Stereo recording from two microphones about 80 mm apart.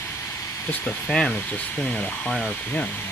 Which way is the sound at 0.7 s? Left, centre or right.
Left.